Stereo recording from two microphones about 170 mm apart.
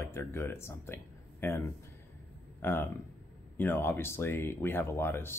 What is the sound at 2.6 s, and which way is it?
Speech, 10° left (ahead or behind).